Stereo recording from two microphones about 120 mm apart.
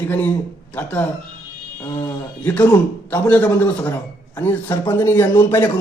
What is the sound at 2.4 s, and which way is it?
A man's voice, 15° left (ahead or behind).